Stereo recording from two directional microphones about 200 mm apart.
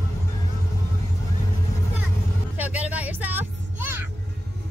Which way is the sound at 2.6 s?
5° right (ahead or behind).